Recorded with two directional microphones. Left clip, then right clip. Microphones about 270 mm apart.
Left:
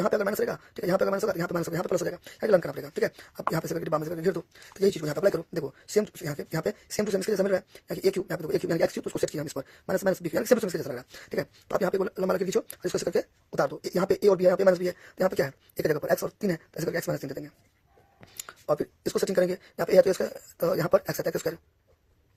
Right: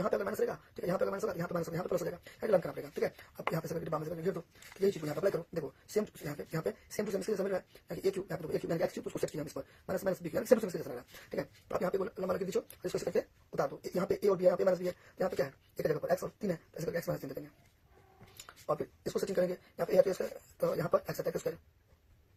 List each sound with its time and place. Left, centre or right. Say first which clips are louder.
0.0 s speech: left 7 dB; left
18.4 s speech: left 8 dB; left